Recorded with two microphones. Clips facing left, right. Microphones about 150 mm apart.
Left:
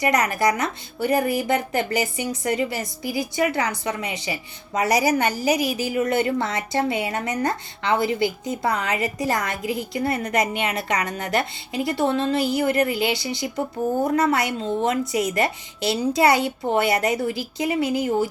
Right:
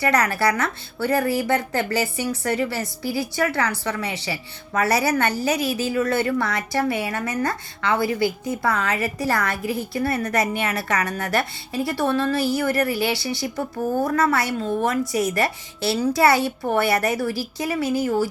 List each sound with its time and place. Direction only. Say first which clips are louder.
0.0 s a woman's voice: even; 15° left (ahead or behind)